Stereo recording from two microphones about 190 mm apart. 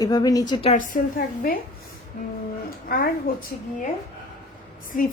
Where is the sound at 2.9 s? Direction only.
50° left (ahead or behind).